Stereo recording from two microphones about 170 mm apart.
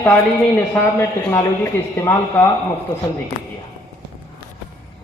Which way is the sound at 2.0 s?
15° left (ahead or behind).